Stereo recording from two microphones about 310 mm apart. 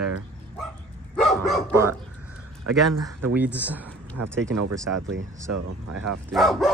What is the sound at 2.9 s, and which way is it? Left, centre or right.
Speech, right.